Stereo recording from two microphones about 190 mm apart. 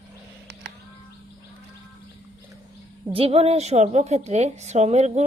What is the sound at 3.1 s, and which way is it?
Speech, 30° right (ahead or behind).